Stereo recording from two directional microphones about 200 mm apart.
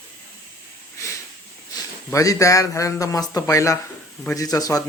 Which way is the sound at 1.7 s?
15° left (ahead or behind).